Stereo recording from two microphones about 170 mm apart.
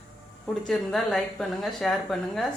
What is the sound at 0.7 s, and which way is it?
Speech, centre (ahead or behind).